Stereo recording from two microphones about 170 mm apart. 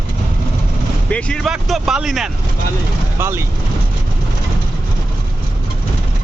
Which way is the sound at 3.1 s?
15° right (ahead or behind).